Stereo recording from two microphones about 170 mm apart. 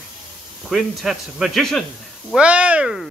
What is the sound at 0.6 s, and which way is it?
Speech, centre (ahead or behind).